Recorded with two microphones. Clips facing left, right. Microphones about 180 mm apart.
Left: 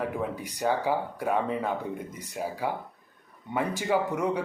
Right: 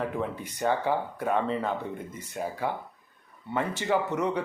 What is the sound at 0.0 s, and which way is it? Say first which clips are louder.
Speech: even; 10° left (ahead or behind).